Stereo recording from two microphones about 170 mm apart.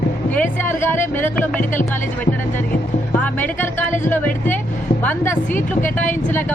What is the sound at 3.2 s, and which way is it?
Speech, 10° left (ahead or behind).